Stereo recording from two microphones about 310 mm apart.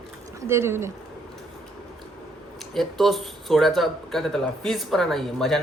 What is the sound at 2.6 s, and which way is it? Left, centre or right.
Speech, centre.